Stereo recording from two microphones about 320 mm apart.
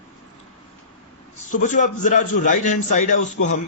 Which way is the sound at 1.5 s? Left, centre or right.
Left.